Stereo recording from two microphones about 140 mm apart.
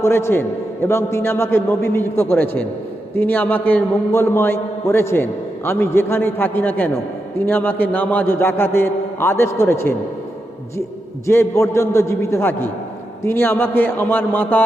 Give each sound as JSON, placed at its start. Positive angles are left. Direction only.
{"t": 0.0, "sound": "a man's voice", "side_deg": 20}
{"t": 11.3, "sound": "a man's voice", "side_deg": 20}